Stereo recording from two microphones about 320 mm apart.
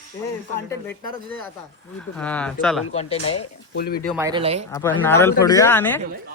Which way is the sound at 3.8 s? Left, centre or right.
Left.